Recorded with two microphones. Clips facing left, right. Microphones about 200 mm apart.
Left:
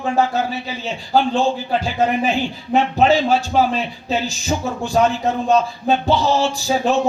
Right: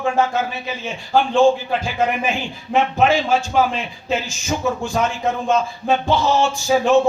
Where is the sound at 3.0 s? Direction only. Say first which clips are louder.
Left 3 dB; 35° left (ahead or behind).